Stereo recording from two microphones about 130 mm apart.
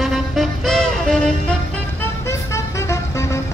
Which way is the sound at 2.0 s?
20° left (ahead or behind).